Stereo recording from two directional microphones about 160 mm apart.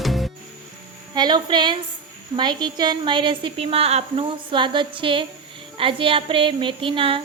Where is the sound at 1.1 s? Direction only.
25° right (ahead or behind).